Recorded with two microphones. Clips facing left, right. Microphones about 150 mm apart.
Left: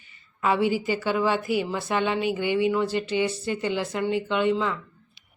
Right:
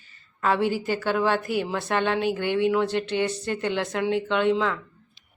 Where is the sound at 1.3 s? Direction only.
50° right (ahead or behind).